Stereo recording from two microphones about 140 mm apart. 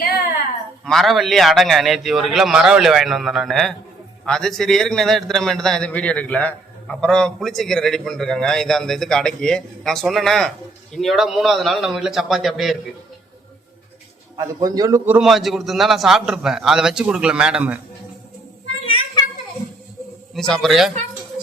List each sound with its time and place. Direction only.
0.9 s a man's voice: centre (ahead or behind)
14.3 s a man's voice: 25° right (ahead or behind)
15.2 s a man's voice: centre (ahead or behind)
20.3 s a man's voice: 5° left (ahead or behind)